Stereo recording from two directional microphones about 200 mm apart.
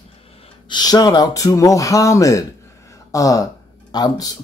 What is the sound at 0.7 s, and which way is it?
Speech, 20° left (ahead or behind).